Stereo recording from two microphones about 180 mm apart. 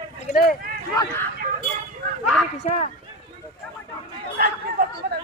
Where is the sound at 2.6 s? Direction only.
40° left (ahead or behind).